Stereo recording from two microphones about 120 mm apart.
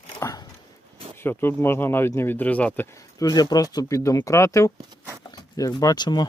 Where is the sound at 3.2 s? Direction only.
35° left (ahead or behind).